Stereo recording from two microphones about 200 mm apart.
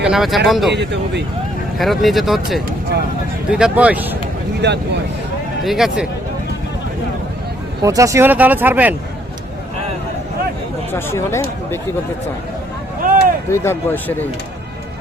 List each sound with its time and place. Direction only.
0.0 s speech: centre (ahead or behind)
0.7 s speech: 60° right (ahead or behind)
1.8 s speech: centre (ahead or behind)
4.6 s speech: 60° right (ahead or behind)
5.6 s speech: centre (ahead or behind)
7.8 s speech: 15° right (ahead or behind)
10.9 s speech: 15° left (ahead or behind)
13.0 s a sound: 45° right (ahead or behind)
13.5 s speech: 10° left (ahead or behind)